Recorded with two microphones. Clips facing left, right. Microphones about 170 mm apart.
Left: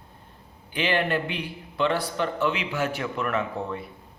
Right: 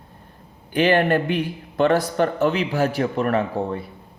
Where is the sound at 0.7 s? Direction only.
45° right (ahead or behind).